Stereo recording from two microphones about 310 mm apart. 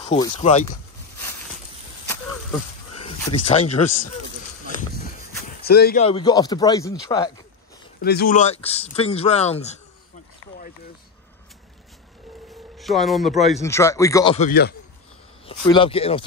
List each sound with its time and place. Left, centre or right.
0.0 s speech: centre
3.4 s speech: left
4.6 s a sound: left
6.0 s speech: centre
8.0 s speech: left
12.7 s speech: centre; by 14.8 s left
15.4 s speech: centre